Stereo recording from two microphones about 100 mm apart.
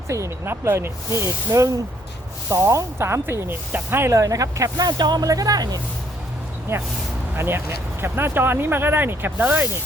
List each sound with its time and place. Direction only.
0.1 s speech: 30° right (ahead or behind)
7.3 s speech: 25° right (ahead or behind)